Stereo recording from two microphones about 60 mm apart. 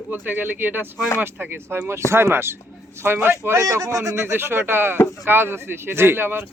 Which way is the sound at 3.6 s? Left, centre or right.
Right.